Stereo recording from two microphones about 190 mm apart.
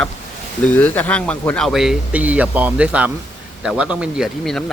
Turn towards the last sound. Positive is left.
turn(degrees=0)  # may be behind; listen again after turning